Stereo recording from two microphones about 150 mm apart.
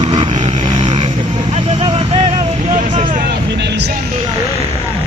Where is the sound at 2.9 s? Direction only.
55° right (ahead or behind).